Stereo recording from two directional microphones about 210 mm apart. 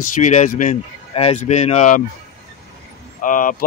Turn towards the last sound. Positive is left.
turn(degrees=40)  # may be behind; listen again after turning